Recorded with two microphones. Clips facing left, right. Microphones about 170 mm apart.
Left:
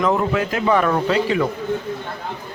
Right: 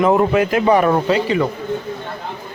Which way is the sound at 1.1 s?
5° right (ahead or behind).